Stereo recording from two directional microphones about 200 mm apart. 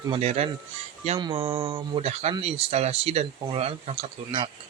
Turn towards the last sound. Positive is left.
turn(degrees=-30)  # may be behind; listen again after turning